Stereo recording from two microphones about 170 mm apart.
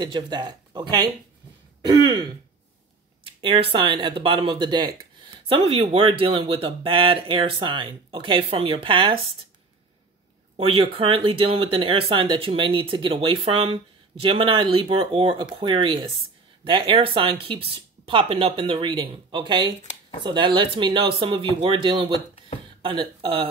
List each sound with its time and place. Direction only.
0.0 s speech: 25° right (ahead or behind)
3.3 s speech: 30° right (ahead or behind)
10.5 s speech: 30° right (ahead or behind)